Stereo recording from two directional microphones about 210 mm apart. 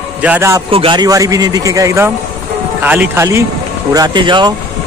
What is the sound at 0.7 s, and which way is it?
A man's voice, 25° right (ahead or behind).